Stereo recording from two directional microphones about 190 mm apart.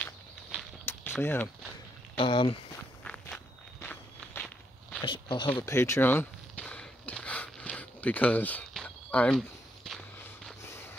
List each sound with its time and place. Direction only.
0.0 s a sound: 5° left (ahead or behind)
2.1 s speech: 25° left (ahead or behind)
3.0 s walk: 5° left (ahead or behind)
5.0 s speech: 25° left (ahead or behind)
5.6 s walk: 15° left (ahead or behind)
10.6 s snort: 15° left (ahead or behind)